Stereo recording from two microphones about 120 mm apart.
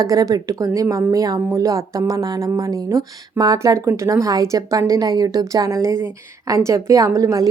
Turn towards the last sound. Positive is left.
turn(degrees=-30)  # may be behind; listen again after turning